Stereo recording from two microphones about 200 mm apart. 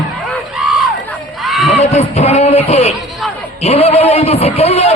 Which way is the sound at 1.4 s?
Centre (ahead or behind).